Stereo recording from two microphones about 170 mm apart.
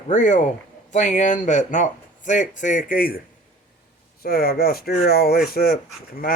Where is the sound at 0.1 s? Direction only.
50° left (ahead or behind).